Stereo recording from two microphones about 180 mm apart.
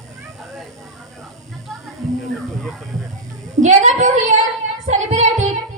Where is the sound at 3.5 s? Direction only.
45° right (ahead or behind).